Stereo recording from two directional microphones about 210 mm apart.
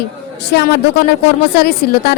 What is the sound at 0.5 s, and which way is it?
Speech, 50° left (ahead or behind).